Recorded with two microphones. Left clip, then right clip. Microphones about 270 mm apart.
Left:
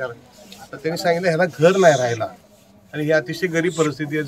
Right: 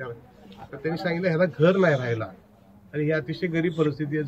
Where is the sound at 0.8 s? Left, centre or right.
Centre.